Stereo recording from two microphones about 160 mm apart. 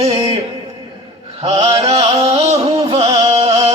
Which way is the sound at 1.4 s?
40° right (ahead or behind).